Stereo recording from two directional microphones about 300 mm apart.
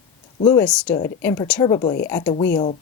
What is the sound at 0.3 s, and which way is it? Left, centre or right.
A woman's voice, centre.